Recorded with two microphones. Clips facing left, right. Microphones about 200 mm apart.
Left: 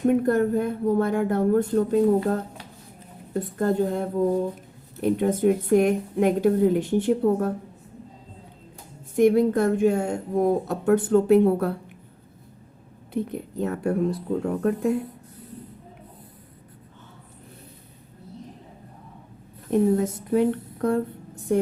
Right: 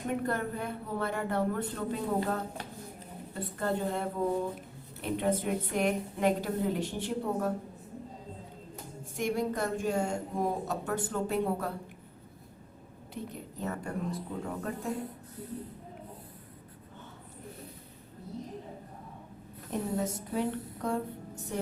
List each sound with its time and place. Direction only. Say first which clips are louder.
0.2 s a woman's voice: left 12 dB; 45° left (ahead or behind)
9.1 s speech: left 13 dB; 55° left (ahead or behind)
13.2 s speech: left 9 dB; 60° left (ahead or behind)
19.7 s speech: left 12 dB; 60° left (ahead or behind)